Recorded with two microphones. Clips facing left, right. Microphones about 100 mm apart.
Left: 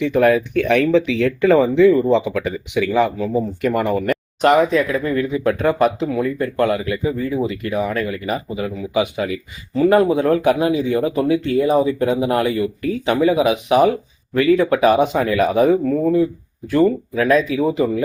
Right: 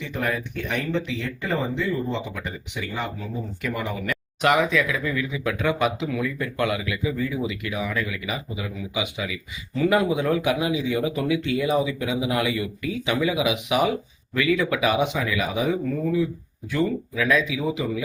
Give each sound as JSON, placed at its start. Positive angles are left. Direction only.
{"t": 0.0, "sound": "speech", "side_deg": 65}
{"t": 3.6, "sound": "speech", "side_deg": 50}
{"t": 4.1, "sound": "speech", "side_deg": 35}